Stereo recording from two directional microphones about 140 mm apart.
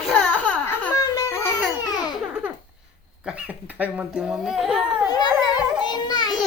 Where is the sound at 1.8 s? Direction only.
30° left (ahead or behind).